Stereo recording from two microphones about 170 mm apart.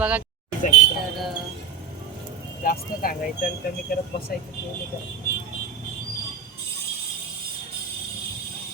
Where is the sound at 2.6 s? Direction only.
60° left (ahead or behind).